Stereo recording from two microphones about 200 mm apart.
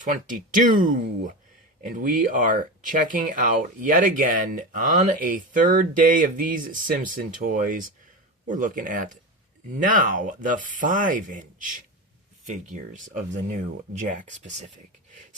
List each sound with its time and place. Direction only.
0.0 s speech: 40° right (ahead or behind)